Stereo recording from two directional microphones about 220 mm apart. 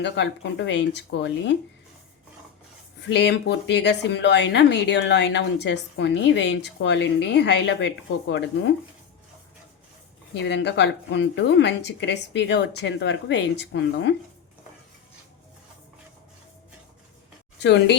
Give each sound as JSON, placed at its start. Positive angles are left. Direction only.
{"t": 0.0, "sound": "speech", "side_deg": 50}
{"t": 3.1, "sound": "speech", "side_deg": 50}
{"t": 10.3, "sound": "speech", "side_deg": 50}
{"t": 17.6, "sound": "speech", "side_deg": 50}